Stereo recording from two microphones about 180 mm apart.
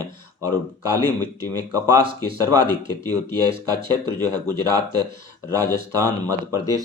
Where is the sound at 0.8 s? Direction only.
20° left (ahead or behind).